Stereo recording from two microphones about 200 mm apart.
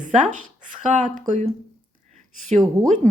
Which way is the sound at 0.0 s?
40° right (ahead or behind).